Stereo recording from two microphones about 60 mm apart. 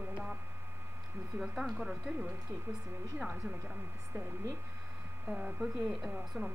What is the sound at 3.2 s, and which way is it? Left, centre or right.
Speech, centre.